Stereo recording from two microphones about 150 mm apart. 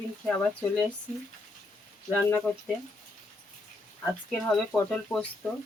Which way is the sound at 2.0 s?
15° left (ahead or behind).